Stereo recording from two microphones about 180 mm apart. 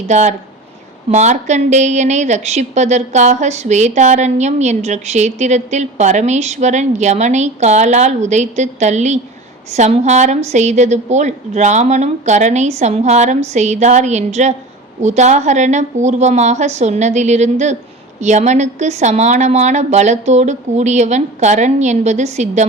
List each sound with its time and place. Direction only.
0.1 s a woman's voice: 40° right (ahead or behind)